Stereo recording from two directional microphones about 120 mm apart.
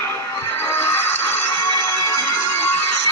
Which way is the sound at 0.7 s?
20° left (ahead or behind).